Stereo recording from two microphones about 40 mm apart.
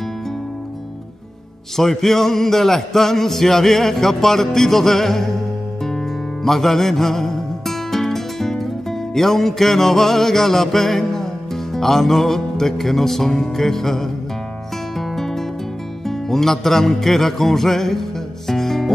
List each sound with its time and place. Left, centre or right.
1.8 s music: centre
6.4 s music: centre